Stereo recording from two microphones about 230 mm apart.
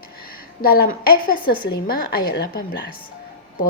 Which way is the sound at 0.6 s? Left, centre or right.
Left.